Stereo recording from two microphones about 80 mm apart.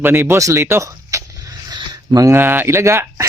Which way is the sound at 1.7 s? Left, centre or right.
Right.